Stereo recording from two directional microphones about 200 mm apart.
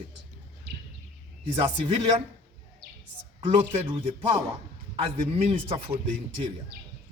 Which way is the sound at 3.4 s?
25° right (ahead or behind).